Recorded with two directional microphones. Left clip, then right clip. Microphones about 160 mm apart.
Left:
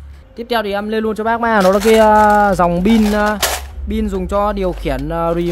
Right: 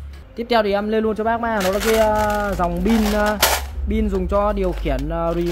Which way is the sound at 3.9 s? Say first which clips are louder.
Left 2 dB; 25° left (ahead or behind).